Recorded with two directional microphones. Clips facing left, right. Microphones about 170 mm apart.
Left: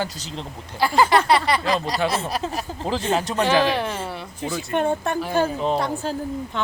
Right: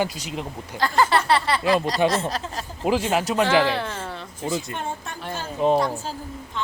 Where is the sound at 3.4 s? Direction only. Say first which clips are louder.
Left 3 dB; 15° left (ahead or behind).